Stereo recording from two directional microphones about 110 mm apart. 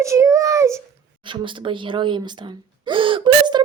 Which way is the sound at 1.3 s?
50° right (ahead or behind).